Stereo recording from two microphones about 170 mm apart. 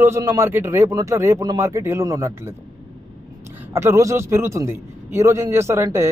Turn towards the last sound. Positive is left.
turn(degrees=-15)  # may be behind; listen again after turning